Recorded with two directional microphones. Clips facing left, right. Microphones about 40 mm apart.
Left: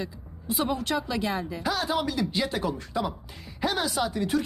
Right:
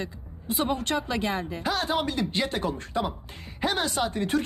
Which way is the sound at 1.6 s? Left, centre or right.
Centre.